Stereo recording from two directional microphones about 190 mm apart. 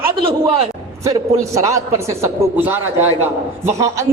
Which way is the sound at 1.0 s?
15° right (ahead or behind).